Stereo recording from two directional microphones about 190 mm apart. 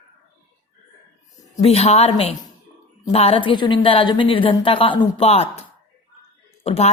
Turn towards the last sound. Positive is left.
turn(degrees=35)  # may be behind; listen again after turning